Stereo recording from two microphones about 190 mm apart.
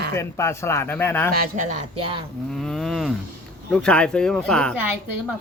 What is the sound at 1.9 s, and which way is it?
Speech, 25° right (ahead or behind).